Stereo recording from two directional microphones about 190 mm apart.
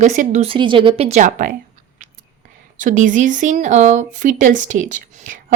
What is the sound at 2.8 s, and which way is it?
Speech, 45° right (ahead or behind).